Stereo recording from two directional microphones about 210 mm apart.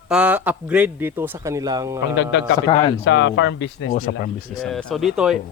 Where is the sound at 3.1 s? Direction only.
60° left (ahead or behind).